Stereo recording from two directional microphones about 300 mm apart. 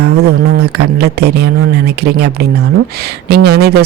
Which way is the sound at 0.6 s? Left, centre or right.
Right.